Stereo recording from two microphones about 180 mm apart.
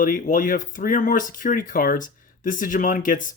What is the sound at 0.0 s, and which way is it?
Speech, 50° left (ahead or behind).